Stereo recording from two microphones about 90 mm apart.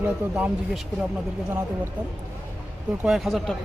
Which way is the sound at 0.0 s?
20° right (ahead or behind).